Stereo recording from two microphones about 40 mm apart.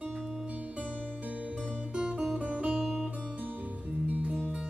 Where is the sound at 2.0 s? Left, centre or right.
Right.